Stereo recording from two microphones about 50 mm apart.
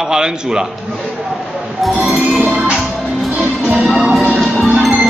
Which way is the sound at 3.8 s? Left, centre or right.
Centre.